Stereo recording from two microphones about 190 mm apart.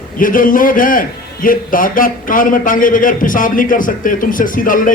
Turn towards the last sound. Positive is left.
turn(degrees=45)  # may be behind; listen again after turning